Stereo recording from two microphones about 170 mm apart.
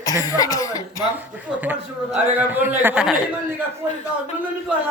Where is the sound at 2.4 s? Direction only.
10° right (ahead or behind).